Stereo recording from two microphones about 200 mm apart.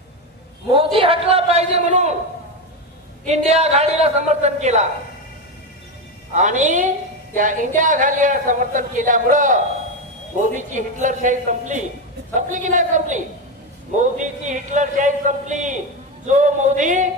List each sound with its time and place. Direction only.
0.9 s a sound: 30° right (ahead or behind)
3.3 s a woman's voice: 35° right (ahead or behind)
6.3 s a woman's voice: 35° right (ahead or behind)